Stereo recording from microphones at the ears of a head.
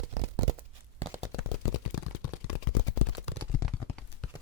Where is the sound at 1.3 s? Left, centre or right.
Left.